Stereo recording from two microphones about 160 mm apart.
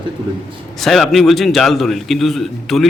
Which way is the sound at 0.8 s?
Centre (ahead or behind).